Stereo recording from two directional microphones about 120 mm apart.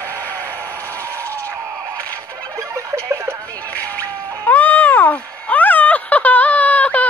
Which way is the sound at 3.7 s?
15° left (ahead or behind).